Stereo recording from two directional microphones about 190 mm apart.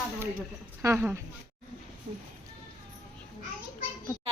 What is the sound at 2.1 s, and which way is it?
Speech, 40° right (ahead or behind).